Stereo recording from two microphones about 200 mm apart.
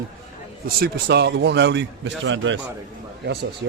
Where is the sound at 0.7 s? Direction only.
55° right (ahead or behind).